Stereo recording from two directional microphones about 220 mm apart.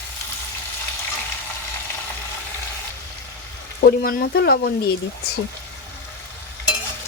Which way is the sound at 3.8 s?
45° left (ahead or behind).